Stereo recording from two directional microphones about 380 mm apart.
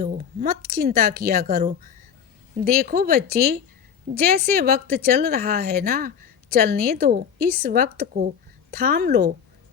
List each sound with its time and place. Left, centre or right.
0.0 s a woman's voice: right